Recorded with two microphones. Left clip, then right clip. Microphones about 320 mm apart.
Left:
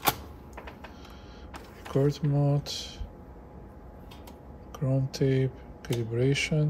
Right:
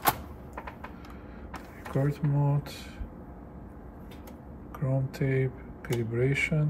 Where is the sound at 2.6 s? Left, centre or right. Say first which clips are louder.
Left 6 dB; centre.